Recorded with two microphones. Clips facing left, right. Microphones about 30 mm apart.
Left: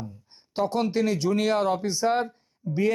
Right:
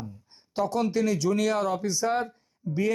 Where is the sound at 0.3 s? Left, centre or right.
Left.